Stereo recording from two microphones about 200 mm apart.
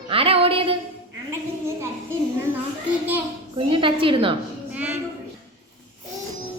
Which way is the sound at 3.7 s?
25° right (ahead or behind).